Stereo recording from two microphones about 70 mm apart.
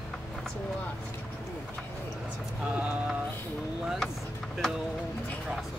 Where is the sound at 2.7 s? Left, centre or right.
Centre.